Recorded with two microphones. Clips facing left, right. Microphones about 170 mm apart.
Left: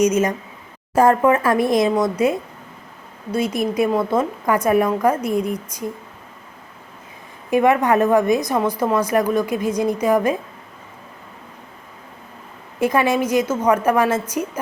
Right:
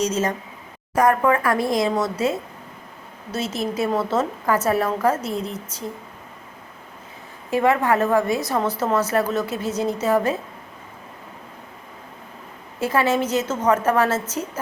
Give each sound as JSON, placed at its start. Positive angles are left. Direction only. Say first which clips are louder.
{"t": 0.0, "sound": "a woman's voice", "louder": "left 5 dB", "side_deg": 15}
{"t": 0.9, "sound": "a woman's voice", "louder": "left 3 dB", "side_deg": 25}
{"t": 7.5, "sound": "a woman's voice", "louder": "left 3 dB", "side_deg": 15}
{"t": 12.8, "sound": "a woman's voice", "louder": "left 3 dB", "side_deg": 15}